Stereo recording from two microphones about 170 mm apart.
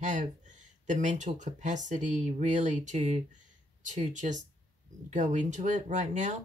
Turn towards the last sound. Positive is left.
turn(degrees=-45)  # may be behind; listen again after turning